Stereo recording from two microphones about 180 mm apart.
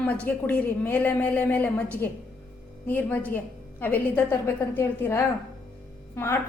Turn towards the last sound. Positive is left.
turn(degrees=10)  # may be behind; listen again after turning